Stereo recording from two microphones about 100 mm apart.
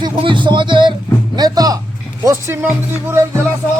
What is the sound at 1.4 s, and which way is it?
Speech, 40° right (ahead or behind).